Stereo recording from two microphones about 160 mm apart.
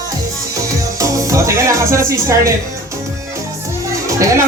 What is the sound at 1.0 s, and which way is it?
Speech, 20° right (ahead or behind).